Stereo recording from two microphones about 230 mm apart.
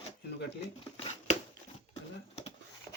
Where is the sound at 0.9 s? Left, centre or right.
Left.